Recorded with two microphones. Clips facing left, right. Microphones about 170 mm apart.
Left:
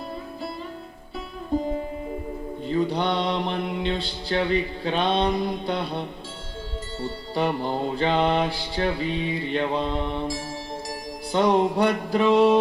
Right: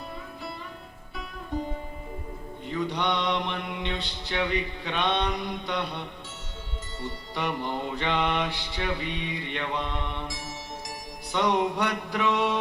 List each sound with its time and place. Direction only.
2.6 s mantra: 30° left (ahead or behind)
10.8 s music: 30° left (ahead or behind)